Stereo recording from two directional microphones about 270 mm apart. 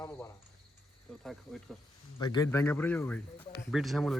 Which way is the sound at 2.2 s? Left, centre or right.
Centre.